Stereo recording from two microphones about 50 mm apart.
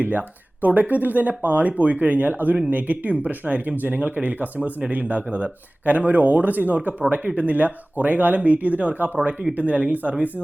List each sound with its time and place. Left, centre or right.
0.0 s speech: right